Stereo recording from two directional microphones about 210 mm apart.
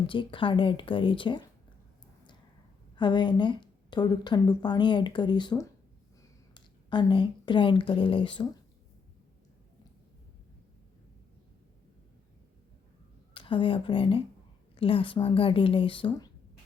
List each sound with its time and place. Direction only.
0.1 s speech: 25° left (ahead or behind)
2.9 s speech: 20° left (ahead or behind)
13.3 s speech: 25° left (ahead or behind)